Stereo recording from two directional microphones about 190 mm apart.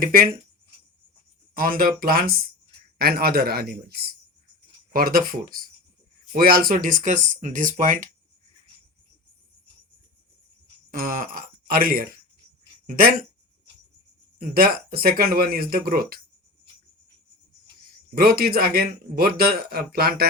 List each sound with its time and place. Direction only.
0.0 s a man's voice: 50° right (ahead or behind)
1.5 s a man's voice: 45° right (ahead or behind)
10.9 s a man's voice: 45° right (ahead or behind)
14.3 s a man's voice: 50° right (ahead or behind)
18.1 s a man's voice: 50° right (ahead or behind)